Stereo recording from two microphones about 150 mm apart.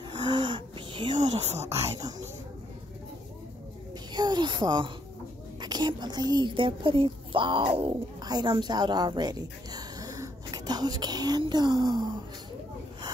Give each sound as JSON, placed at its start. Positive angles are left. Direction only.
{"t": 0.1, "sound": "gasp", "side_deg": -30}
{"t": 1.4, "sound": "speech", "side_deg": -45}
{"t": 4.1, "sound": "a woman's voice", "side_deg": -30}